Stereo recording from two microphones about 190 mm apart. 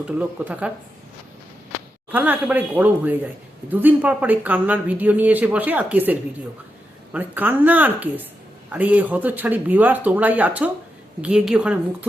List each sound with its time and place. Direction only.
0.0 s speech: 5° right (ahead or behind)
2.1 s a woman's voice: 10° right (ahead or behind)